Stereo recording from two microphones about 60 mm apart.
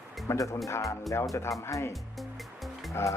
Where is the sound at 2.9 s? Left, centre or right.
Left.